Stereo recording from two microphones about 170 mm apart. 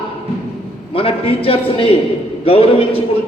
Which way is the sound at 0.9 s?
35° left (ahead or behind).